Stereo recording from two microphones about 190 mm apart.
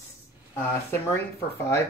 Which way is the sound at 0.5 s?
15° left (ahead or behind).